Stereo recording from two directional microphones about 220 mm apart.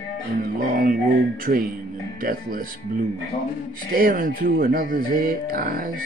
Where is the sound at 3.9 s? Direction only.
40° right (ahead or behind).